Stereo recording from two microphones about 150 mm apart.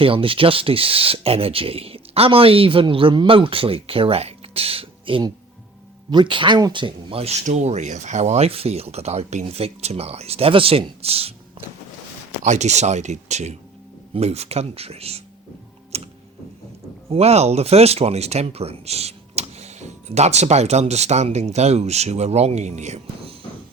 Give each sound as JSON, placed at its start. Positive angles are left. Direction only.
{"t": 0.0, "sound": "speech", "side_deg": -35}
{"t": 12.5, "sound": "speech", "side_deg": -50}
{"t": 15.9, "sound": "tick-tock", "side_deg": -45}
{"t": 17.1, "sound": "speech", "side_deg": -45}